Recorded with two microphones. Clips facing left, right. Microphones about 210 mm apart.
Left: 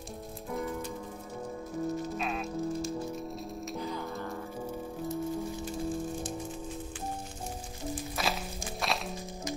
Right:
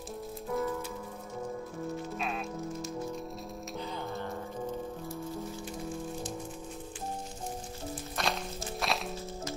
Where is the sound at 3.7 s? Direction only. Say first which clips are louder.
Even; 25° right (ahead or behind).